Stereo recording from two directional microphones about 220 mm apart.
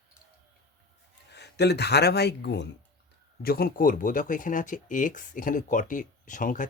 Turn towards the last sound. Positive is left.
turn(degrees=35)  # may be behind; listen again after turning